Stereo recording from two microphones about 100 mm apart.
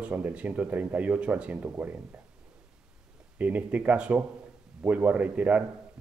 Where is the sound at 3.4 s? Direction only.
15° right (ahead or behind).